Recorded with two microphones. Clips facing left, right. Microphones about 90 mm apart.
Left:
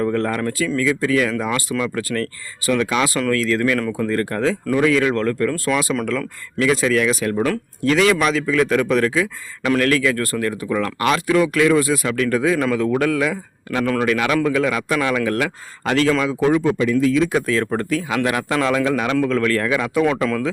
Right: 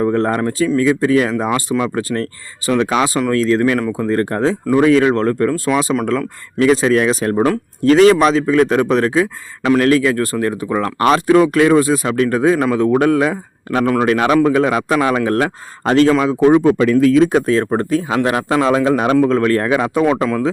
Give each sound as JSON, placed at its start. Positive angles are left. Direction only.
{"t": 0.0, "sound": "a man's voice", "side_deg": -25}
{"t": 13.7, "sound": "speech", "side_deg": -20}
{"t": 14.0, "sound": "a man's voice", "side_deg": -35}
{"t": 16.7, "sound": "a man's voice", "side_deg": -60}
{"t": 17.3, "sound": "a man's voice", "side_deg": -30}